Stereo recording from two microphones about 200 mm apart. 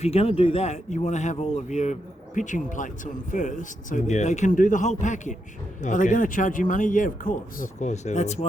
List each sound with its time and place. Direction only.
0.0 s speech: 30° left (ahead or behind)